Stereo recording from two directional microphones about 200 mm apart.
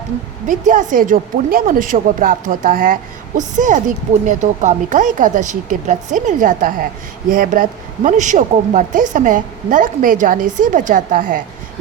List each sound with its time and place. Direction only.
0.4 s a woman's voice: 40° right (ahead or behind)